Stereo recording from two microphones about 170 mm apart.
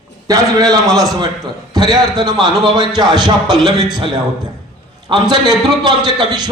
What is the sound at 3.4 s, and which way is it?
Speech, centre (ahead or behind).